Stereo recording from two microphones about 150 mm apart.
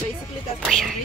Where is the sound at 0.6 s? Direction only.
Centre (ahead or behind).